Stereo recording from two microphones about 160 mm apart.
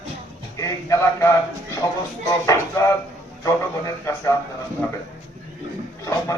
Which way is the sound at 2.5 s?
20° left (ahead or behind).